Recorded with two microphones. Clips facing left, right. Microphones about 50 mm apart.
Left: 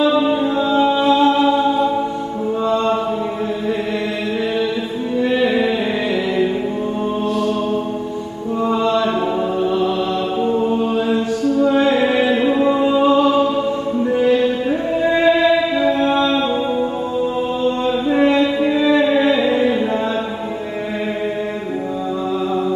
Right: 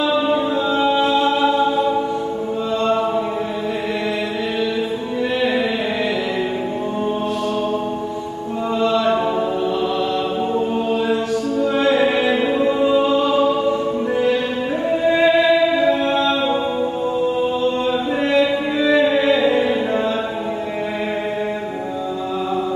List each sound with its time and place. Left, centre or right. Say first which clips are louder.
0.7 s music: left 3 dB; centre
11.1 s mantra: left 2 dB; centre
11.6 s music: left 1 dB; centre
14.9 s music: even; centre
18.4 s music: left 2 dB; centre